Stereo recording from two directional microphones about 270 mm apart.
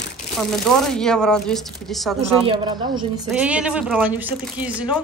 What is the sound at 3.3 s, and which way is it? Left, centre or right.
A woman's voice, centre.